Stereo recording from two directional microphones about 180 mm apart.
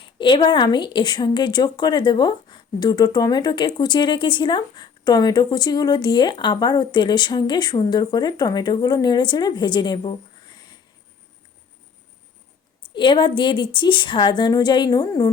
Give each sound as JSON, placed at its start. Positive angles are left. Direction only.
{"t": 0.0, "sound": "a woman's voice", "side_deg": 25}
{"t": 12.9, "sound": "a woman's voice", "side_deg": 25}